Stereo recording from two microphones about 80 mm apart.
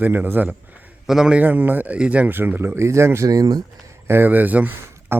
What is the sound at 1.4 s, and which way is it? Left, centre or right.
Turkey, right.